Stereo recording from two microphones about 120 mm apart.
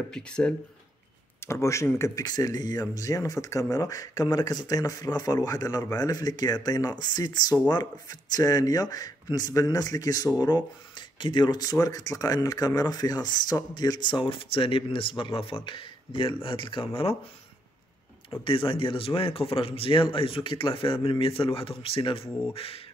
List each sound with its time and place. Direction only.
0.1 s speech: 10° left (ahead or behind)
1.4 s speech: 25° left (ahead or behind); by 17.2 s 50° left (ahead or behind)
18.4 s speech: 45° left (ahead or behind)